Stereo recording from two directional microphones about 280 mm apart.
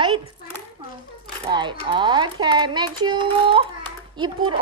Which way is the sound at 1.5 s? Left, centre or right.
Centre.